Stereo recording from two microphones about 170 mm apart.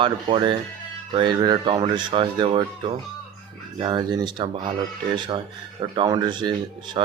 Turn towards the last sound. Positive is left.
turn(degrees=-25)  # may be behind; listen again after turning